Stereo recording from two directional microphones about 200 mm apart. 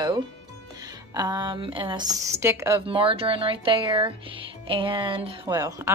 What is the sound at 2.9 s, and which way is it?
A woman's voice, 25° right (ahead or behind).